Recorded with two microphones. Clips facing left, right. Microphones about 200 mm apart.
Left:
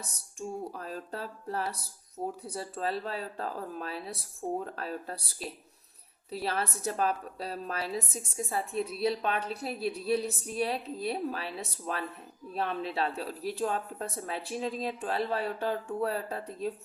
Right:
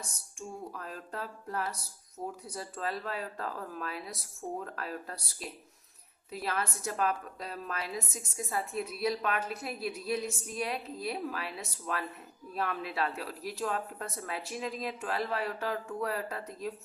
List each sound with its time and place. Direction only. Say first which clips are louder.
0.3 s a woman's voice: left 5 dB; 30° left (ahead or behind)